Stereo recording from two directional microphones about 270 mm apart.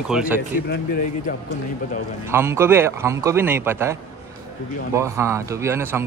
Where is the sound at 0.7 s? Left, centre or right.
Left.